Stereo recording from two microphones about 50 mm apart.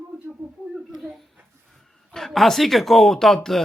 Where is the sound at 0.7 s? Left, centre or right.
Centre.